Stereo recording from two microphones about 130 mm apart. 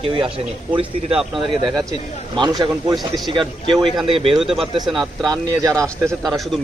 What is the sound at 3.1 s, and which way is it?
Speech, 40° right (ahead or behind).